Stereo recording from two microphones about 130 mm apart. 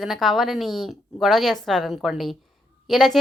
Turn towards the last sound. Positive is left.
turn(degrees=0)  # may be behind; listen again after turning